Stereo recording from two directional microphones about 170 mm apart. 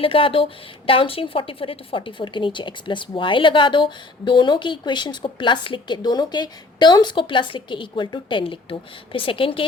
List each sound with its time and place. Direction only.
0.0 s a woman's voice: 30° left (ahead or behind)